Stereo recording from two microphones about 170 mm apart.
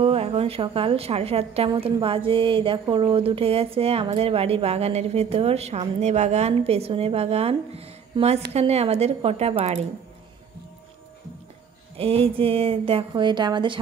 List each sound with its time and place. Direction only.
0.0 s a woman's voice: 35° right (ahead or behind)
12.0 s a woman's voice: 35° right (ahead or behind)